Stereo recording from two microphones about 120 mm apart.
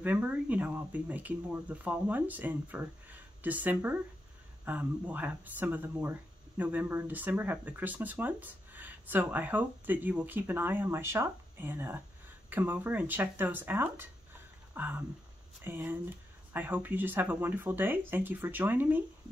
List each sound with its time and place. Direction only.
0.0 s speech: 15° right (ahead or behind)
14.7 s a sound: 15° right (ahead or behind)
15.6 s speech: 15° right (ahead or behind)